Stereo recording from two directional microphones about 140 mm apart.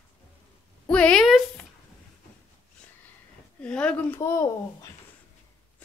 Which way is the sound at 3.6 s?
10° left (ahead or behind).